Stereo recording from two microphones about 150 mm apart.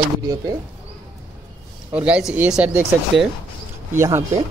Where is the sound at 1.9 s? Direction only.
10° right (ahead or behind).